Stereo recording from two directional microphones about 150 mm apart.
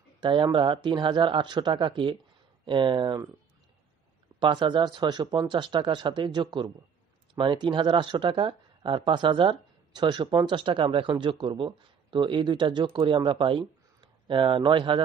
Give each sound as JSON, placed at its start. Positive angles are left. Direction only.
{"t": 0.2, "sound": "speech", "side_deg": -35}
{"t": 4.4, "sound": "speech", "side_deg": -30}